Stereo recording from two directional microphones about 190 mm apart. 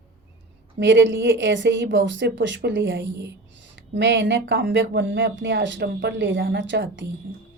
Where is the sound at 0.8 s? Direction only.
75° right (ahead or behind).